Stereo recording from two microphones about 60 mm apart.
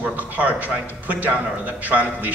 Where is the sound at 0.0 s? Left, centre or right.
Right.